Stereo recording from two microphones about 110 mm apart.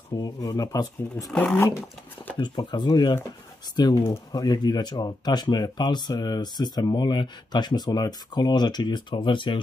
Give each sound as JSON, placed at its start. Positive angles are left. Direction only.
{"t": 0.2, "sound": "speech", "side_deg": 35}
{"t": 1.3, "sound": "speech", "side_deg": 15}
{"t": 2.3, "sound": "speech", "side_deg": 45}